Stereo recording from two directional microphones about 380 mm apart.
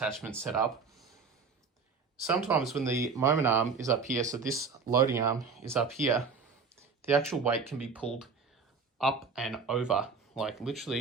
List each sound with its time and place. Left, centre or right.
0.0 s speech: centre
2.2 s speech: centre